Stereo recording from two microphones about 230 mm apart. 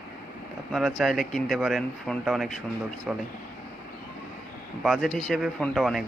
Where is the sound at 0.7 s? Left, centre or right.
Centre.